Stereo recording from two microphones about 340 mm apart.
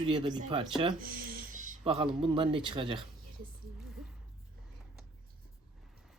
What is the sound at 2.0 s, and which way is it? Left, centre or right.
Speech, centre.